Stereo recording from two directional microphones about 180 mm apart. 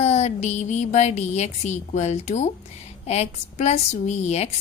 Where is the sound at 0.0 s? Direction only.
40° left (ahead or behind).